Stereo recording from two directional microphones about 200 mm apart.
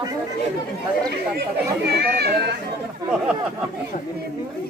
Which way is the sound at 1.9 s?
50° right (ahead or behind).